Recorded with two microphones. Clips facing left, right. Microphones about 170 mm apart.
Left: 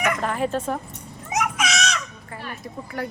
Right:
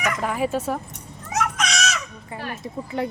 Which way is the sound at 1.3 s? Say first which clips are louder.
Even; 10° left (ahead or behind).